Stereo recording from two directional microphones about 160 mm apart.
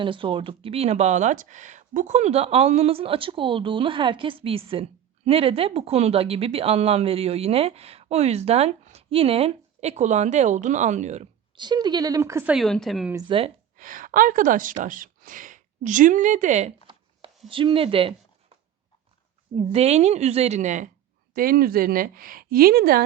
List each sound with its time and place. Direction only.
0.0 s speech: 30° right (ahead or behind); by 11.3 s 45° right (ahead or behind)
11.5 s a woman's voice: 25° right (ahead or behind)
12.5 s a woman's voice: 5° left (ahead or behind)
13.2 s speech: 35° right (ahead or behind)
13.7 s speech: 55° right (ahead or behind)
16.9 s a sound: 35° right (ahead or behind)
17.5 s speech: 30° right (ahead or behind)
19.5 s a woman's voice: 40° right (ahead or behind)
21.3 s speech: 65° right (ahead or behind)